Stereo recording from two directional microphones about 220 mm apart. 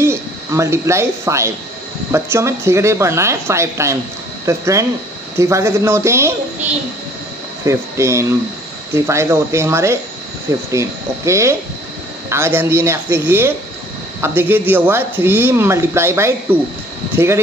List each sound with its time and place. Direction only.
0.0 s speech: 10° right (ahead or behind)
7.6 s speech: 15° right (ahead or behind)